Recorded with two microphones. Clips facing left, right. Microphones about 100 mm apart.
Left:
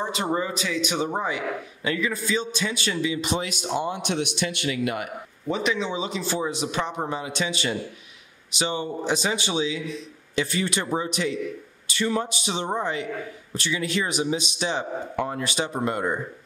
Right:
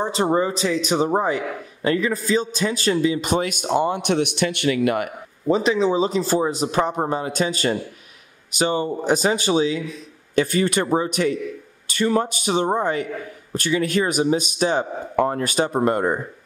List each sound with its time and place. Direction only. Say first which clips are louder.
0.0 s a man's voice: right 6 dB; 35° right (ahead or behind); by 5.1 s 55° right (ahead or behind)
5.5 s a man's voice: right 7 dB; 35° right (ahead or behind)